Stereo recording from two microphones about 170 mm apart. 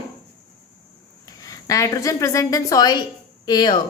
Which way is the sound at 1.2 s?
20° left (ahead or behind).